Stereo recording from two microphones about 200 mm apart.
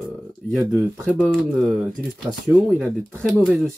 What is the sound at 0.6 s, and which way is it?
Speech, 15° right (ahead or behind).